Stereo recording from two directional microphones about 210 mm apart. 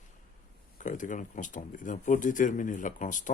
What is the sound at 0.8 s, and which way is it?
Speech, 35° left (ahead or behind).